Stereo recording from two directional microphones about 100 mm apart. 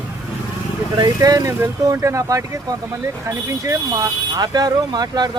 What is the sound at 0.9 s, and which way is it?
Speech, 40° right (ahead or behind).